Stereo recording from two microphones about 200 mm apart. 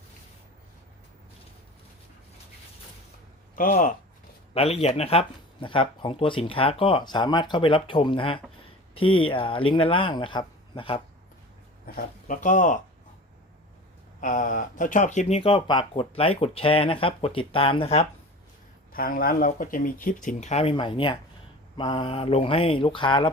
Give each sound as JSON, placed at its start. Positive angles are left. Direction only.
{"t": 3.5, "sound": "speech", "side_deg": 45}
{"t": 4.5, "sound": "speech", "side_deg": 30}
{"t": 11.9, "sound": "speech", "side_deg": 40}
{"t": 14.2, "sound": "speech", "side_deg": 40}
{"t": 18.9, "sound": "speech", "side_deg": 45}